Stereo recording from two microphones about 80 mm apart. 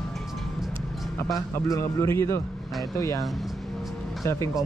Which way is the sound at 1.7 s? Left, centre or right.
Left.